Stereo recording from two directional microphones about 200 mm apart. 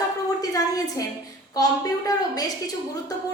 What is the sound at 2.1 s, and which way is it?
Speech, 15° left (ahead or behind).